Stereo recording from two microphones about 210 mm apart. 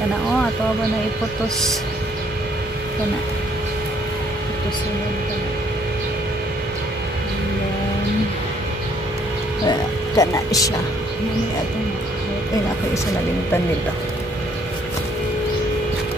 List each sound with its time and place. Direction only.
9.7 s speech: 15° left (ahead or behind)